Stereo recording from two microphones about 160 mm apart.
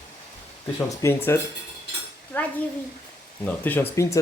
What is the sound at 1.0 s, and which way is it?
Speech, 15° left (ahead or behind).